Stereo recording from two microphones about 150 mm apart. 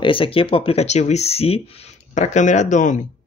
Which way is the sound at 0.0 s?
35° left (ahead or behind).